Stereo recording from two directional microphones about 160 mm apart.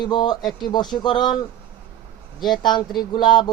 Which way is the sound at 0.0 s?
25° left (ahead or behind).